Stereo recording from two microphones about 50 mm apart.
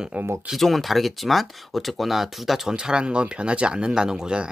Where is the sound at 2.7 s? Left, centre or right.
Centre.